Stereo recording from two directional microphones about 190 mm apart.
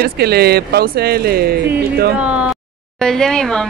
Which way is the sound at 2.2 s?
5° right (ahead or behind).